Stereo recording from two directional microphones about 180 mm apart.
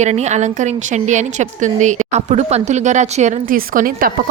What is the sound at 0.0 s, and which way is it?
A woman's voice, 40° right (ahead or behind).